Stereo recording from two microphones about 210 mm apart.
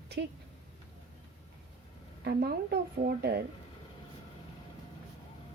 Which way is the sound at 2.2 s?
45° right (ahead or behind).